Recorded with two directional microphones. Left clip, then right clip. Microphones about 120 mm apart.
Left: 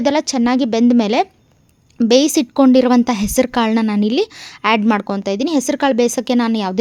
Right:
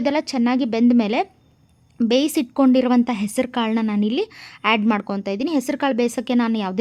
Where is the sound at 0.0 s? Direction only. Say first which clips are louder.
Left 5 dB; 30° left (ahead or behind).